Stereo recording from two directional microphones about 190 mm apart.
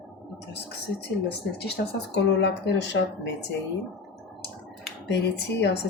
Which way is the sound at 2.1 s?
65° left (ahead or behind).